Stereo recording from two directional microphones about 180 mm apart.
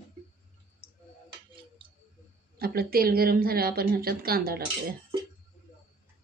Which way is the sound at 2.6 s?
55° right (ahead or behind).